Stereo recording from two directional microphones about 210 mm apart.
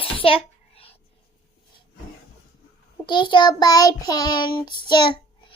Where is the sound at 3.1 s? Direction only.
20° left (ahead or behind).